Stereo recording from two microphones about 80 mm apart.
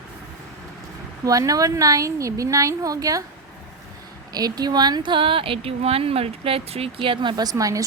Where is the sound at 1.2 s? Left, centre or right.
Right.